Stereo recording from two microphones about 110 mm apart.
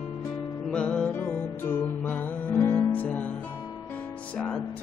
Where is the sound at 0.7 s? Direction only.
10° left (ahead or behind).